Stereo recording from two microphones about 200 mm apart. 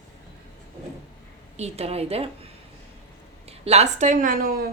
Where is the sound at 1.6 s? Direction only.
30° right (ahead or behind).